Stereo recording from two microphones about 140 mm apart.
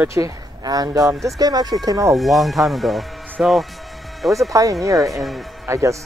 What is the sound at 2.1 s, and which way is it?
Speech, centre (ahead or behind).